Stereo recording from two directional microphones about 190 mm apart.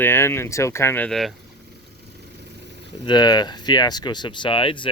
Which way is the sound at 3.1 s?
20° left (ahead or behind).